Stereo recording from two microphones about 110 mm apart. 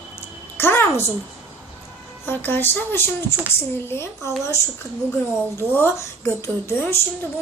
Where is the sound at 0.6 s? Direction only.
20° left (ahead or behind).